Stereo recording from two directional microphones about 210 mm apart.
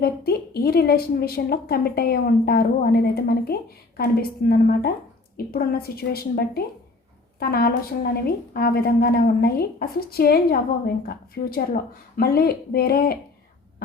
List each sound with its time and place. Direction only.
0.0 s a woman's voice: 50° left (ahead or behind)